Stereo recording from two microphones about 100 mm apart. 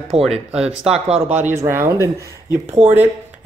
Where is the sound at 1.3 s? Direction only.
25° right (ahead or behind).